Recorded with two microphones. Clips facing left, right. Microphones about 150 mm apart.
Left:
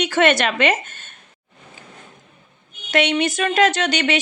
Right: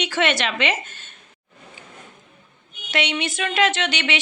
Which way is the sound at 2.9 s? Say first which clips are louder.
Left 6 dB; 50° left (ahead or behind).